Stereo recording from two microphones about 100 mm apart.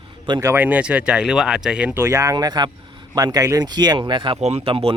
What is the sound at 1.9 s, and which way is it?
Speech, 30° right (ahead or behind).